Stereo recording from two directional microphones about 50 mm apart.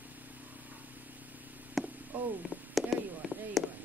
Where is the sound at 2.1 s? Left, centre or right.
Right.